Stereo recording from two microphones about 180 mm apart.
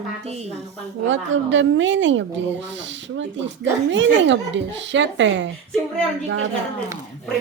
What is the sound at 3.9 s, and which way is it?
A woman's voice, 90° right.